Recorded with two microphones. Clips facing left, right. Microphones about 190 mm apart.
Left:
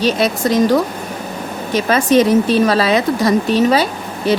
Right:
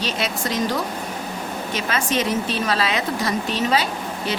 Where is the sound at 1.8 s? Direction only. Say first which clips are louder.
Left 11 dB; 40° left (ahead or behind).